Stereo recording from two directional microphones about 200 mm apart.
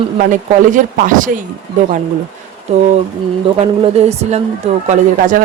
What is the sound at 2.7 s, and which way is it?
Speech, 35° right (ahead or behind).